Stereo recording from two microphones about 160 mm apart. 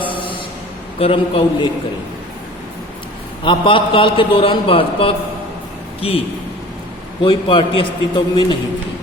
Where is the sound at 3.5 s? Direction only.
30° left (ahead or behind).